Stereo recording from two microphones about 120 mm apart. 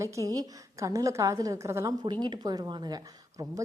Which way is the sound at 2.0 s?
40° right (ahead or behind).